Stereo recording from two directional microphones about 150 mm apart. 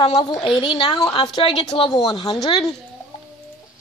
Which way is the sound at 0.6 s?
30° left (ahead or behind).